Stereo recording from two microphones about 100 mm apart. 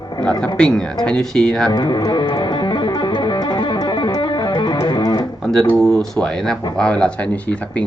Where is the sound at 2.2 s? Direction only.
50° left (ahead or behind).